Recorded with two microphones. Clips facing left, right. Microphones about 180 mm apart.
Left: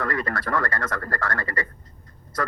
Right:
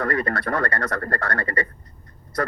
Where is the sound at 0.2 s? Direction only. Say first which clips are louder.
Right 2 dB; 60° right (ahead or behind).